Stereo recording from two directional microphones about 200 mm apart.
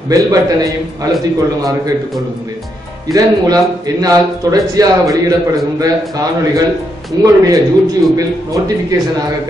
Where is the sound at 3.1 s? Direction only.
20° right (ahead or behind).